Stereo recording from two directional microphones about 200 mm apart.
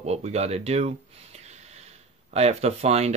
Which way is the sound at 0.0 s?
30° right (ahead or behind).